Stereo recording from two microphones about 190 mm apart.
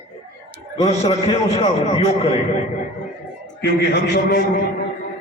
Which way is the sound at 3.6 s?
60° left (ahead or behind).